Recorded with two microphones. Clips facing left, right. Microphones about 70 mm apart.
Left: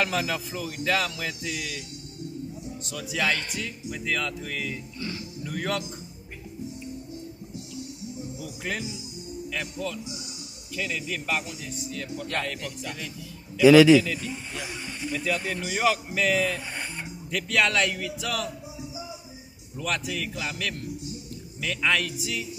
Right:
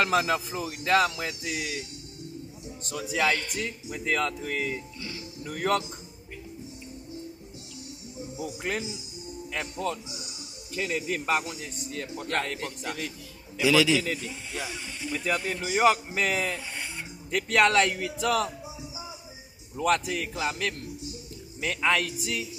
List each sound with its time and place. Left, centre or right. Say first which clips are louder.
0.0 s speech: right 3 dB; right
8.4 s music: right 3 dB; right
9.5 s speech: right 2 dB; right
13.6 s a man's voice: left 8 dB; left
15.1 s speech: even; right
16.5 s music: left 2 dB; left
17.3 s speech: right 3 dB; right
19.8 s speech: right 4 dB; right